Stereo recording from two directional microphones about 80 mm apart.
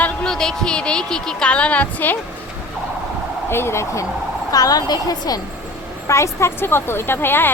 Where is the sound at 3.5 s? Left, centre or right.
Left.